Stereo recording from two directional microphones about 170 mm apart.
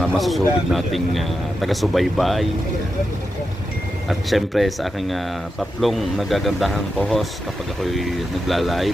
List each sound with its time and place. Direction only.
0.0 s speech: centre (ahead or behind)
4.1 s speech: centre (ahead or behind)